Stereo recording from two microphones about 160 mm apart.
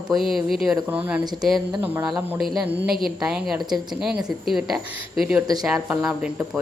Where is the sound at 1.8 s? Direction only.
10° right (ahead or behind).